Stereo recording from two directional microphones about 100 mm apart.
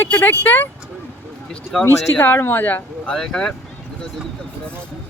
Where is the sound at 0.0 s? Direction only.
20° left (ahead or behind).